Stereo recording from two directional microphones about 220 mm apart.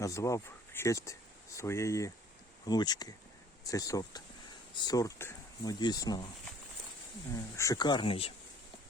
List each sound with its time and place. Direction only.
0.0 s speech: 15° left (ahead or behind)
7.3 s speech: 15° left (ahead or behind)